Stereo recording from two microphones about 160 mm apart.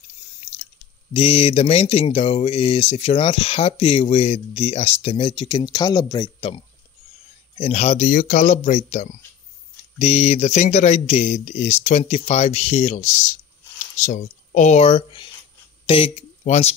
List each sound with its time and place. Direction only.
1.1 s speech: 35° left (ahead or behind)
7.5 s speech: 40° left (ahead or behind)